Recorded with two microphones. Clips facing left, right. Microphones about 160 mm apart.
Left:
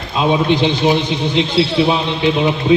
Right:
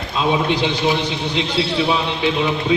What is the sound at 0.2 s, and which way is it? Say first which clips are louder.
Speech: left 4 dB; 25° left (ahead or behind).